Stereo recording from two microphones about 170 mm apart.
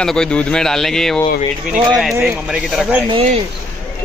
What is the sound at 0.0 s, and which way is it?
Speech, 5° left (ahead or behind).